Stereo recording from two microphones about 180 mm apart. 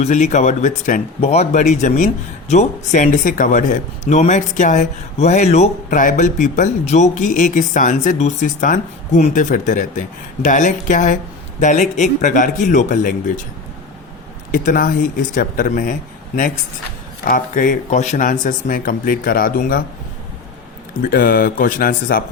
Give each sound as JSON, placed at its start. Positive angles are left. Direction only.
{"t": 0.0, "sound": "speech", "side_deg": 40}
{"t": 14.5, "sound": "speech", "side_deg": 50}
{"t": 21.0, "sound": "speech", "side_deg": 55}